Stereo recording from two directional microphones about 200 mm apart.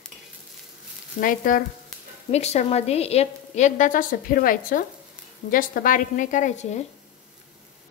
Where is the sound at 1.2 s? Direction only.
45° left (ahead or behind).